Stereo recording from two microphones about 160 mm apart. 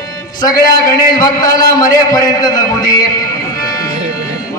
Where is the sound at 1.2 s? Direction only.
20° left (ahead or behind).